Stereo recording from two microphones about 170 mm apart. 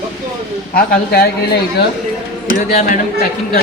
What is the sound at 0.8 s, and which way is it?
Speech, 65° left (ahead or behind).